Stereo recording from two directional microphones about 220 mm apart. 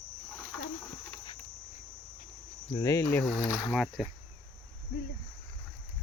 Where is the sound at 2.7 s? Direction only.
15° left (ahead or behind).